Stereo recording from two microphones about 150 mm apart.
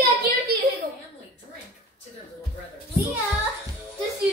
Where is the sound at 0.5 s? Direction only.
90° right.